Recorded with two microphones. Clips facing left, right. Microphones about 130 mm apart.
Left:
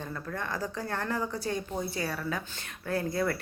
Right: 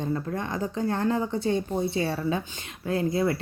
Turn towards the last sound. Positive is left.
turn(degrees=-20)  # may be behind; listen again after turning